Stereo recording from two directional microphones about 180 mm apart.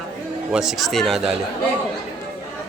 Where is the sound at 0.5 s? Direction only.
Centre (ahead or behind).